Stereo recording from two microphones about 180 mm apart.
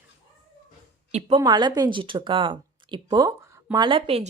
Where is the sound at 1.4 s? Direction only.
25° right (ahead or behind).